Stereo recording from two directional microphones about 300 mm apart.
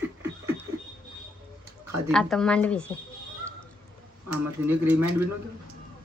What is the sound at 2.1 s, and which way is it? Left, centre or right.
Speech, centre.